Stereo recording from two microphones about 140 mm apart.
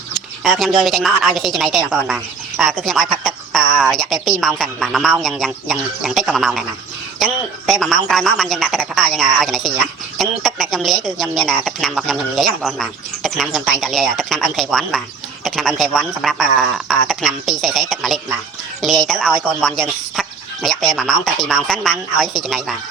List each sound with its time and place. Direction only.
0.4 s a woman's voice: centre (ahead or behind)
7.7 s a woman's voice: centre (ahead or behind)